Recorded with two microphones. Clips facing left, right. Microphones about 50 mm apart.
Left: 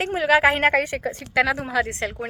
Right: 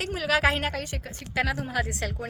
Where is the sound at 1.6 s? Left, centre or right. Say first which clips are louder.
Left 6 dB; left.